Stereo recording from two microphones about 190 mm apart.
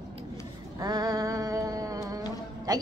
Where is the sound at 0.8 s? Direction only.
20° right (ahead or behind).